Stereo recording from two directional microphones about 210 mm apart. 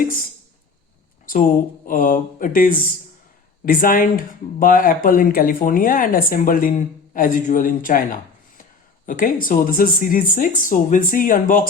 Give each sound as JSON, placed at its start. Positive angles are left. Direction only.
{"t": 1.9, "sound": "speech", "side_deg": 40}